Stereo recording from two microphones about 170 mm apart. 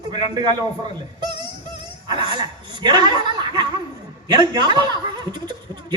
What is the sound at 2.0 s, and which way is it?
Speech, 25° right (ahead or behind).